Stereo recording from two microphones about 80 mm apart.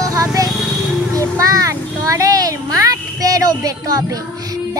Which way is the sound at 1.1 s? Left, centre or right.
Right.